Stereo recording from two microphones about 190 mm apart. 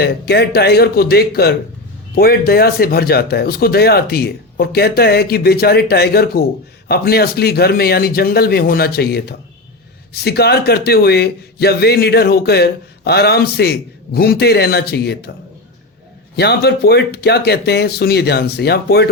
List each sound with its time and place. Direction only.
0.0 s speech: 60° left (ahead or behind)
16.3 s speech: 60° left (ahead or behind)